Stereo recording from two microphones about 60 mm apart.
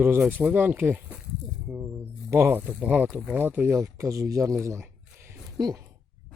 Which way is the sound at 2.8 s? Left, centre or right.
Right.